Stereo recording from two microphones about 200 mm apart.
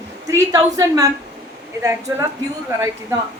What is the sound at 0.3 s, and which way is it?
A woman's voice, 15° right (ahead or behind).